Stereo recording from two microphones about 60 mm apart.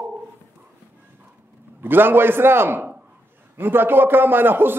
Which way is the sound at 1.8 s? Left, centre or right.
Right.